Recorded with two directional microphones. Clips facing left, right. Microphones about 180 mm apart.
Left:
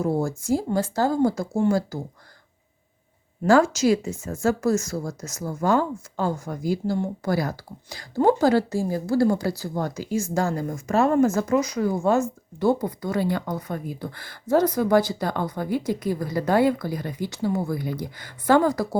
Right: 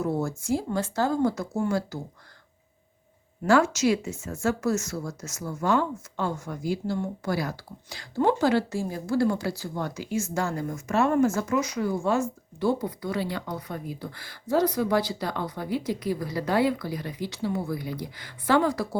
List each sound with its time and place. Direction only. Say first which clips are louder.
0.0 s a woman's voice: left 3 dB; 35° left (ahead or behind)
3.4 s a woman's voice: left 3 dB; 35° left (ahead or behind)